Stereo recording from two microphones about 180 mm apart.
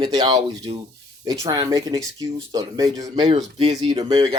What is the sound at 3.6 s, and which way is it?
Speech, 35° right (ahead or behind).